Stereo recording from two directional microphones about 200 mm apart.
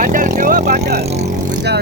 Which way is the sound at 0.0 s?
40° right (ahead or behind).